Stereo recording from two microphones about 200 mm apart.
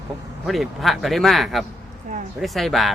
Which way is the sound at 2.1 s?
40° right (ahead or behind).